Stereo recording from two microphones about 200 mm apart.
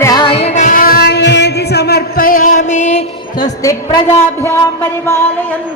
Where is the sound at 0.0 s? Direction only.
20° left (ahead or behind); by 3.0 s 35° left (ahead or behind).